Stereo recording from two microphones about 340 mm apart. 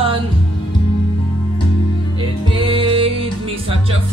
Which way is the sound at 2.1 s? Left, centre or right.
Centre.